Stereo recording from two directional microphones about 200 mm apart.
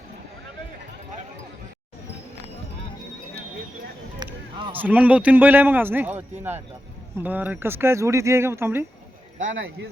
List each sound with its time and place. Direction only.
4.2 s music: 25° right (ahead or behind)
4.7 s a man's voice: 10° right (ahead or behind)